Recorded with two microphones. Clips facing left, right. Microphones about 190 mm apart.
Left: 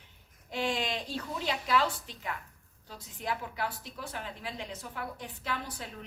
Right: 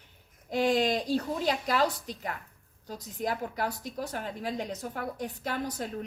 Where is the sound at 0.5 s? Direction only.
40° right (ahead or behind).